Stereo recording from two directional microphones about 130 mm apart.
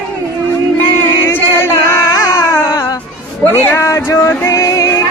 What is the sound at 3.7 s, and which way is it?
Music, 20° left (ahead or behind).